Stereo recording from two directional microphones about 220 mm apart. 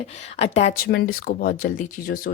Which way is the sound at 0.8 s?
45° left (ahead or behind).